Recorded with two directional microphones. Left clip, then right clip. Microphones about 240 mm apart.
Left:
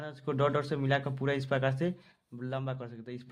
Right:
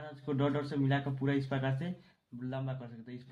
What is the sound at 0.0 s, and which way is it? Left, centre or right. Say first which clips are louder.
Speech: left 4 dB; left.